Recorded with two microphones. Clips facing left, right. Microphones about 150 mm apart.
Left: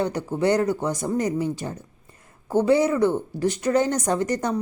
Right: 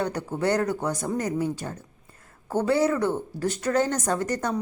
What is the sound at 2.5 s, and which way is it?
Speech, 10° left (ahead or behind).